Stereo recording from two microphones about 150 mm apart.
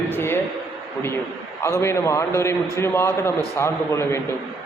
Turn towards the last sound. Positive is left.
turn(degrees=15)  # may be behind; listen again after turning